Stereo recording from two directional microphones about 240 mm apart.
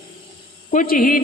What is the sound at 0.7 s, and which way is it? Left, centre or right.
Speech, left.